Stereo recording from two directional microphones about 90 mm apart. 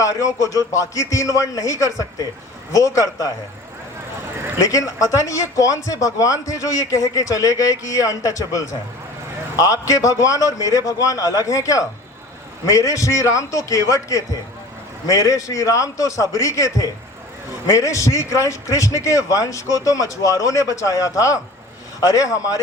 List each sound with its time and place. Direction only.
0.0 s speech: 40° left (ahead or behind)
4.6 s speech: 40° left (ahead or behind)
17.7 s speech: 35° left (ahead or behind)